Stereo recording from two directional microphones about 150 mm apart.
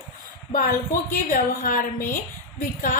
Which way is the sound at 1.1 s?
70° left (ahead or behind).